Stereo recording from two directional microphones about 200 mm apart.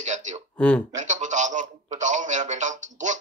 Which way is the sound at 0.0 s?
35° right (ahead or behind).